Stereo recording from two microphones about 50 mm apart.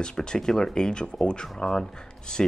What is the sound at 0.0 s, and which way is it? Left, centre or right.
Speech, centre.